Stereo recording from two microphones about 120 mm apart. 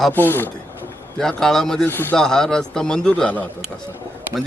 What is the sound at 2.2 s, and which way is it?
Speech, 5° left (ahead or behind).